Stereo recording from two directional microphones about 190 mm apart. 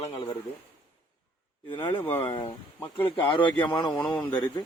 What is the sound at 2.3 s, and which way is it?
Speech, 20° left (ahead or behind).